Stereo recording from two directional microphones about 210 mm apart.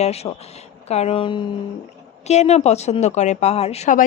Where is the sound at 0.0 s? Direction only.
30° left (ahead or behind).